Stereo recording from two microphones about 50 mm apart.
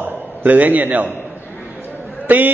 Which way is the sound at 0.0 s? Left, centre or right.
Right.